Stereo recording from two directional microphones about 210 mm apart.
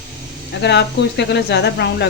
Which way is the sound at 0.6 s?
55° left (ahead or behind).